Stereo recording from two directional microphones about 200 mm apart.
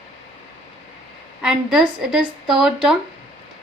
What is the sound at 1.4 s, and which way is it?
A woman's voice, centre (ahead or behind).